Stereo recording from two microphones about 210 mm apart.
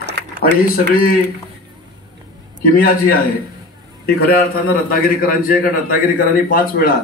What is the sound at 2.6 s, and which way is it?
A man's voice, 45° left (ahead or behind).